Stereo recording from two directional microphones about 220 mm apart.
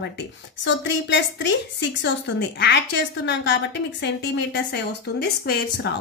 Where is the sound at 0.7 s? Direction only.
55° left (ahead or behind).